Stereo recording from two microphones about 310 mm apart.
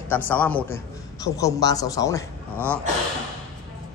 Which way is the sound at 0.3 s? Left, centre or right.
Centre.